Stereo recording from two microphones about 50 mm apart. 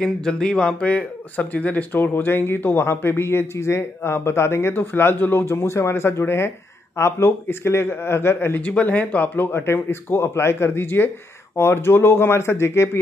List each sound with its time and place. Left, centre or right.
0.0 s speech: centre
2.0 s speech: left
4.7 s speech: left
8.6 s speech: left
9.4 s speech: left